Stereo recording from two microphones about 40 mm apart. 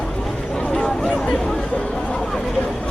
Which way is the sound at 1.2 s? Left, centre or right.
Centre.